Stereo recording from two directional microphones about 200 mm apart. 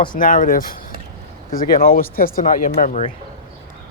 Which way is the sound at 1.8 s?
45° left (ahead or behind).